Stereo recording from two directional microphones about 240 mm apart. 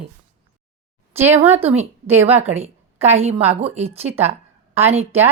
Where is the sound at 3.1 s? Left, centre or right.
Right.